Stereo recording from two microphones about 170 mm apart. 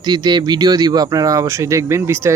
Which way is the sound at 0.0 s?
25° right (ahead or behind).